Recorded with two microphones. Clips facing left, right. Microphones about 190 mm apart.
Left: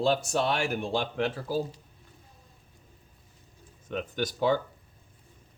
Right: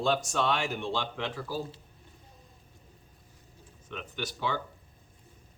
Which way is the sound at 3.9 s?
45° left (ahead or behind).